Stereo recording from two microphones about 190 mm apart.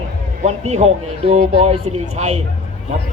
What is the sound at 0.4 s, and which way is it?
A man's voice, 35° right (ahead or behind).